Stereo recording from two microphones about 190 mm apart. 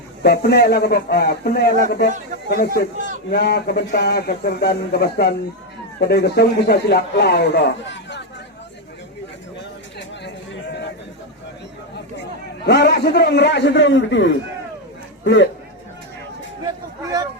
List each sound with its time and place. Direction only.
0.2 s a man's voice: 60° left (ahead or behind)
10.2 s a sound: 65° left (ahead or behind)
12.6 s a man's voice: 60° left (ahead or behind); by 15.4 s 75° left (ahead or behind)